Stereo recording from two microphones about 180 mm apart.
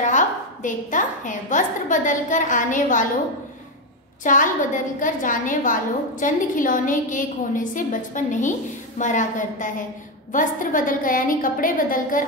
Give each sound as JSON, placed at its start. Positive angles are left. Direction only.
{"t": 0.0, "sound": "a woman's voice", "side_deg": 45}
{"t": 4.2, "sound": "a woman's voice", "side_deg": 45}